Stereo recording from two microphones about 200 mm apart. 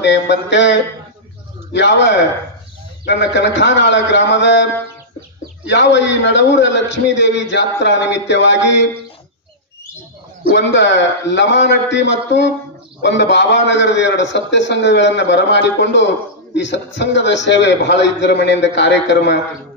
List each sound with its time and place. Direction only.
0.0 s a man's voice: 60° left (ahead or behind)
5.7 s a man's voice: 60° left (ahead or behind)
10.5 s a man's voice: 65° left (ahead or behind)